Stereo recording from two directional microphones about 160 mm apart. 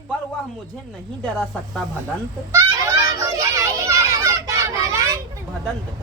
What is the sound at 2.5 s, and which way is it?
Children playing, 20° right (ahead or behind).